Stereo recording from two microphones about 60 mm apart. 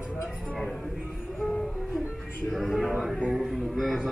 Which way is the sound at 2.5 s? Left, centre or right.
Centre.